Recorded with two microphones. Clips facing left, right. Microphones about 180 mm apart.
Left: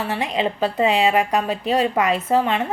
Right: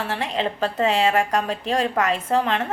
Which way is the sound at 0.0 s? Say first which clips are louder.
Left 2 dB; 10° left (ahead or behind).